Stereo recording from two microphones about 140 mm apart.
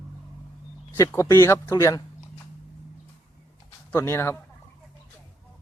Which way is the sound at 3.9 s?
20° left (ahead or behind).